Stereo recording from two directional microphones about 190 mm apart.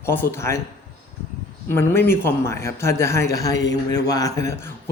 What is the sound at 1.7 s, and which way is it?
A man's voice, 10° left (ahead or behind).